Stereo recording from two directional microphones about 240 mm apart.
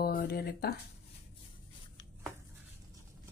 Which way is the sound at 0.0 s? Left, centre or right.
Left.